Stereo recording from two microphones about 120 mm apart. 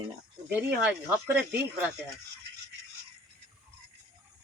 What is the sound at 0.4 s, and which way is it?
Speech, 10° right (ahead or behind).